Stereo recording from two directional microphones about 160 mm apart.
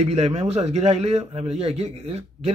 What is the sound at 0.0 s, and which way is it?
A man's voice, 40° right (ahead or behind).